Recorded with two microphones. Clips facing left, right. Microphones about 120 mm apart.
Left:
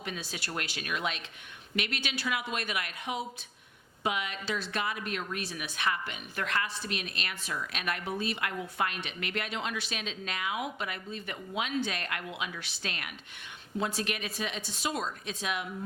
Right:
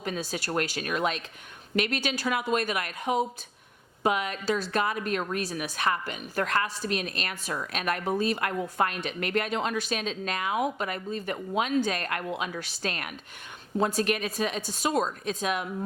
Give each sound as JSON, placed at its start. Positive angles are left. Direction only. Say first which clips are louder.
{"t": 0.0, "sound": "a woman's voice", "louder": "right 7 dB", "side_deg": -40}